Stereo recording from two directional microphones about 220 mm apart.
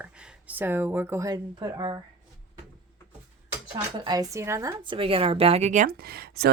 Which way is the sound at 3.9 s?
15° right (ahead or behind).